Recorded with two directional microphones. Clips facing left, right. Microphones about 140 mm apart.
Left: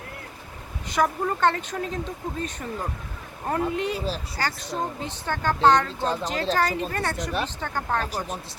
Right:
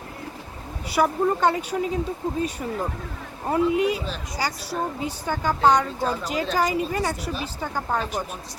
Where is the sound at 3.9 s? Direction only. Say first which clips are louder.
Left 2 dB; 35° left (ahead or behind).